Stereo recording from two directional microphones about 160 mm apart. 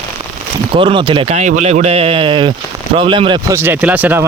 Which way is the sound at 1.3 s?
50° right (ahead or behind).